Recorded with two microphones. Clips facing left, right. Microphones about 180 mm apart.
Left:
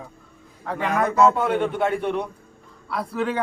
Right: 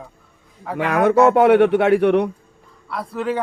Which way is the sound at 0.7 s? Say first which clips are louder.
Right 5 dB; 75° right (ahead or behind).